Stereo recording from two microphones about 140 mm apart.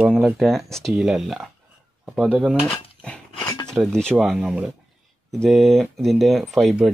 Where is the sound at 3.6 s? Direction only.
Centre (ahead or behind).